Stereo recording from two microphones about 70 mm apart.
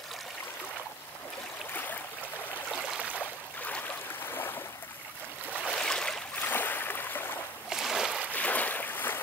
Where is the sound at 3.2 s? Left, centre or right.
Left.